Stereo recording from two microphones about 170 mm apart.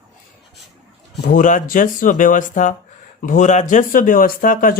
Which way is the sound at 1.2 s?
50° left (ahead or behind).